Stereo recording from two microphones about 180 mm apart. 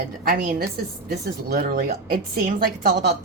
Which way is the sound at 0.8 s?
60° right (ahead or behind).